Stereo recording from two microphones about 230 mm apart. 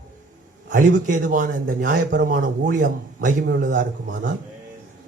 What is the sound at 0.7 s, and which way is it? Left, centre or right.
Speech, right.